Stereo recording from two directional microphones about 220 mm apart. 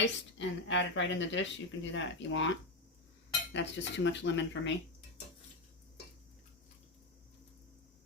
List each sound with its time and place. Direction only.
0.0 s speech: 55° left (ahead or behind)
3.5 s speech: 55° left (ahead or behind)